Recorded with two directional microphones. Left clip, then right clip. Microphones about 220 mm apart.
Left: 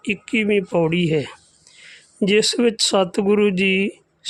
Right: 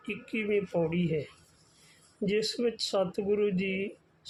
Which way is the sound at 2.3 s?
45° left (ahead or behind).